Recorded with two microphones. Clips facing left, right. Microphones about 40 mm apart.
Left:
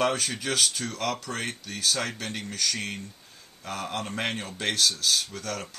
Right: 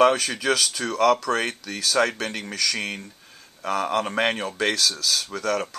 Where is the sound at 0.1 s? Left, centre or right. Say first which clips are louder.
Right 6 dB; right.